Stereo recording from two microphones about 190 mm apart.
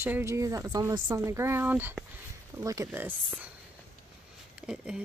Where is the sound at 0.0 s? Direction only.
15° right (ahead or behind).